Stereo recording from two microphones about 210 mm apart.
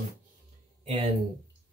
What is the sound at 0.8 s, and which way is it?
Speech, 25° right (ahead or behind).